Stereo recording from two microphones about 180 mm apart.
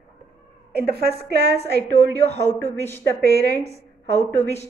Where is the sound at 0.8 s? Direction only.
60° right (ahead or behind).